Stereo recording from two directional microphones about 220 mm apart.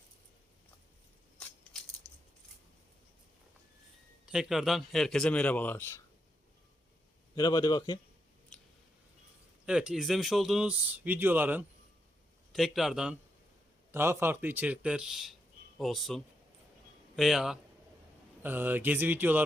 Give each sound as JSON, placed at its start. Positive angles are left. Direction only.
{"t": 4.3, "sound": "speech", "side_deg": 0}
{"t": 7.3, "sound": "speech", "side_deg": 20}
{"t": 8.5, "sound": "squish", "side_deg": 5}
{"t": 9.6, "sound": "speech", "side_deg": -5}